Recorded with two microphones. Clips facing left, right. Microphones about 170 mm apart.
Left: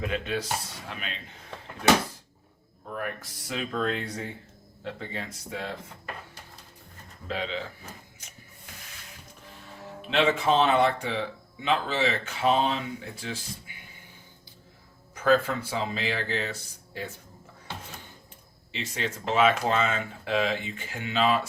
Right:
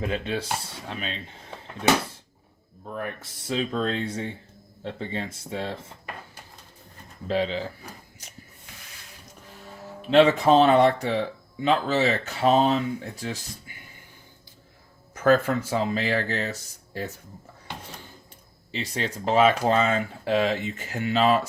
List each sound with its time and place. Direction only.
0.0 s speech: 30° right (ahead or behind)
2.9 s speech: 25° right (ahead or behind)
7.3 s speech: 35° right (ahead or behind)
10.1 s speech: 40° right (ahead or behind)
15.1 s speech: 45° right (ahead or behind)
18.7 s speech: 35° right (ahead or behind)